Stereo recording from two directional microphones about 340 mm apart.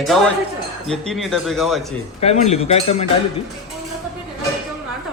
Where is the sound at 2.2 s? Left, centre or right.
Centre.